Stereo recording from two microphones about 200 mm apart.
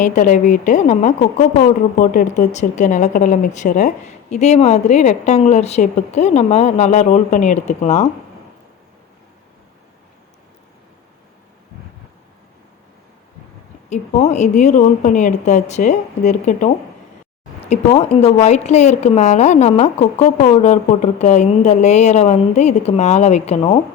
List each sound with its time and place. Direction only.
0.0 s speech: 40° left (ahead or behind)
13.9 s speech: 35° left (ahead or behind)